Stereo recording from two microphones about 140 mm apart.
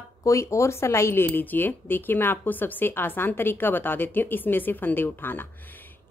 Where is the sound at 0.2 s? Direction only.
20° left (ahead or behind).